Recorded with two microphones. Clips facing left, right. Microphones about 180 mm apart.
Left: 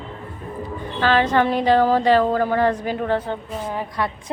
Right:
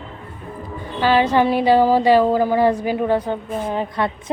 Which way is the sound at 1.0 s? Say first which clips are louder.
Right 2 dB; 10° right (ahead or behind).